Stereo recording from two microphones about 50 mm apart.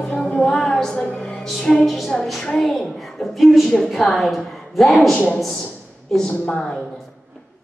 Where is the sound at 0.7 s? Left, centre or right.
Centre.